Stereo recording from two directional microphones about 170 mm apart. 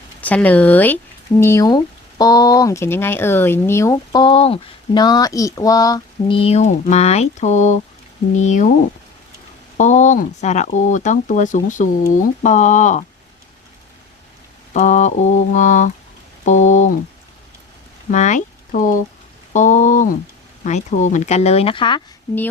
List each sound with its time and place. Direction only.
0.2 s speech: 10° left (ahead or behind); by 8.7 s 45° left (ahead or behind)
9.7 s speech: 45° left (ahead or behind)
14.7 s speech: 45° left (ahead or behind)
18.1 s speech: 45° left (ahead or behind); by 22.0 s 30° left (ahead or behind)